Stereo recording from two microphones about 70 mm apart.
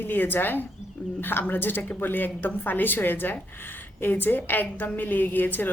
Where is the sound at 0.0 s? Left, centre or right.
Left.